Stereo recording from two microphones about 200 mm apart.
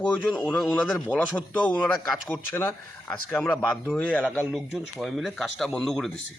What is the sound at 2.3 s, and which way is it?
Speech, 10° left (ahead or behind).